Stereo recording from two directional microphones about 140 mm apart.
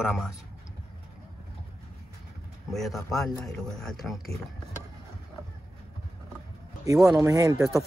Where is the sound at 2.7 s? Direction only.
Centre (ahead or behind).